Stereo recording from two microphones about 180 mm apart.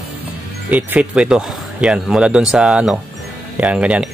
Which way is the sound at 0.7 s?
10° right (ahead or behind).